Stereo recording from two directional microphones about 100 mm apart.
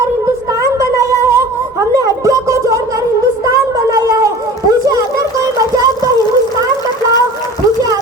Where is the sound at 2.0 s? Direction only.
30° right (ahead or behind).